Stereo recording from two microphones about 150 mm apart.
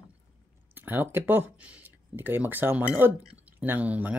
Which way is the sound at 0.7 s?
15° right (ahead or behind).